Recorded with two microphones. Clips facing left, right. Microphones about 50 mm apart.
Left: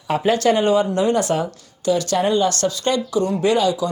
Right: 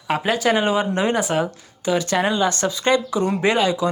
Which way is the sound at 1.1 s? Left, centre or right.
Centre.